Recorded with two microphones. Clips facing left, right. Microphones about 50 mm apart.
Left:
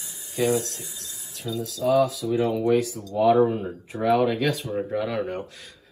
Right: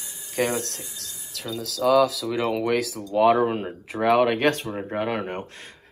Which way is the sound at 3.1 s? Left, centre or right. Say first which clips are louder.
Even; right.